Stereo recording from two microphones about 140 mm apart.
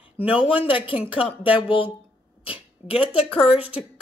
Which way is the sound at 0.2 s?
10° right (ahead or behind).